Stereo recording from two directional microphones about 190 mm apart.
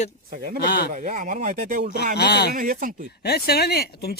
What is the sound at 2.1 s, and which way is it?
Speech, 60° left (ahead or behind).